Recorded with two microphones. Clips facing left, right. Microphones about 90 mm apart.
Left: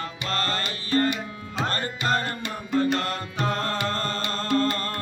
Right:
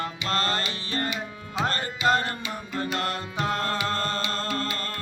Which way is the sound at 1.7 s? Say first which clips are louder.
Right 3 dB; 50° left (ahead or behind).